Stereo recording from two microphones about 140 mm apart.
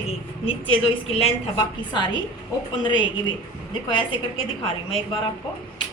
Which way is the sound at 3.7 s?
35° left (ahead or behind).